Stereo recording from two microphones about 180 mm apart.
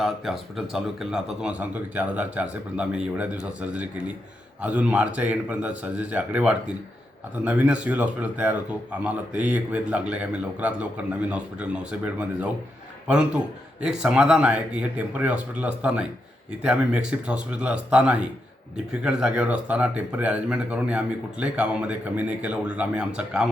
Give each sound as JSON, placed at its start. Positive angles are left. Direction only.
{"t": 0.0, "sound": "a man's voice", "side_deg": 0}